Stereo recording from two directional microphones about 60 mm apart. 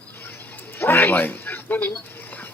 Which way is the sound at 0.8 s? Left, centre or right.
Left.